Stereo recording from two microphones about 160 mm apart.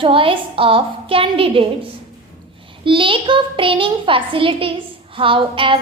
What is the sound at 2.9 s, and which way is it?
A child's voice, 30° right (ahead or behind).